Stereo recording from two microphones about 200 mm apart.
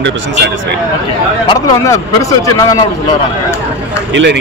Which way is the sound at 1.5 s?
20° left (ahead or behind).